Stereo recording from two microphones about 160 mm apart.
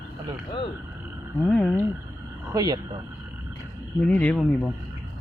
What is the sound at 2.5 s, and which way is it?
Speech, 25° right (ahead or behind).